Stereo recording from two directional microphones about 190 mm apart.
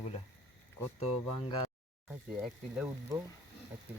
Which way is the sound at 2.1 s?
5° right (ahead or behind).